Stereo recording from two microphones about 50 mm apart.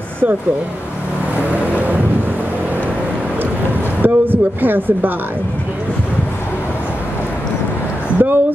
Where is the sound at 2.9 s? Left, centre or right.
Right.